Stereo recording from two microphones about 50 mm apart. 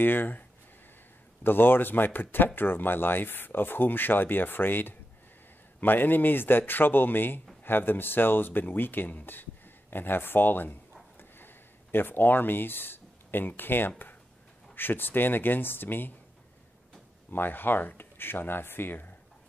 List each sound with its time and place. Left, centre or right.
0.0 s speech: left
1.4 s speech: left
11.1 s a sound: left
14.8 s speech: left
17.3 s speech: left